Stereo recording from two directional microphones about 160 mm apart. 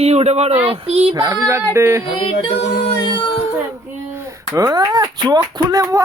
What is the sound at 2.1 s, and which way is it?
Music, 35° left (ahead or behind).